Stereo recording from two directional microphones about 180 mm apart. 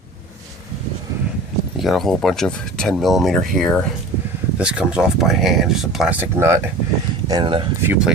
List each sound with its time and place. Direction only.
1.7 s speech: centre (ahead or behind)
7.3 s speech: 25° right (ahead or behind)
7.8 s speech: 10° right (ahead or behind)